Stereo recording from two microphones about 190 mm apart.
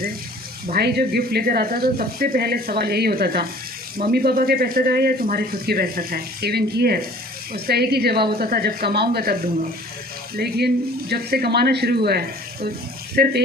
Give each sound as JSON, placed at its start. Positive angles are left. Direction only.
{"t": 0.7, "sound": "speech", "side_deg": -55}